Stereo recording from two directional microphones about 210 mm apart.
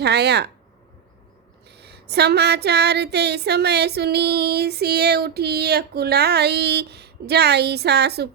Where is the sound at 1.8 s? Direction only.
50° right (ahead or behind).